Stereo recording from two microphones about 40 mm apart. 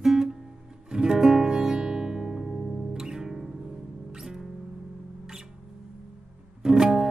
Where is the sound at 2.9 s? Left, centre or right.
Centre.